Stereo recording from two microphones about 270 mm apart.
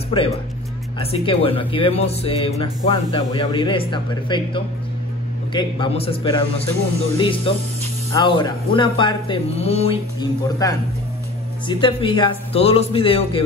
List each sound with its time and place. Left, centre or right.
0.1 s speech: centre